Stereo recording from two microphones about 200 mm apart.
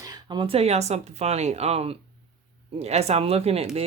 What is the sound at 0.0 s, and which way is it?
Speech, 20° right (ahead or behind).